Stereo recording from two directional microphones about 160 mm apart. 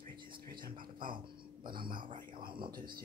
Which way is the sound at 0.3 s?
70° right (ahead or behind).